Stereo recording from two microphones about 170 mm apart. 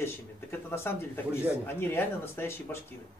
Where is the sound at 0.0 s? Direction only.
15° left (ahead or behind).